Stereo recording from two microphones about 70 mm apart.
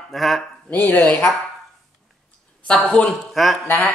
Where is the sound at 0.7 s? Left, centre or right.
Left.